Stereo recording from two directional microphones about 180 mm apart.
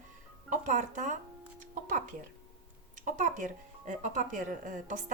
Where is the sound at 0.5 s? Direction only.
45° right (ahead or behind).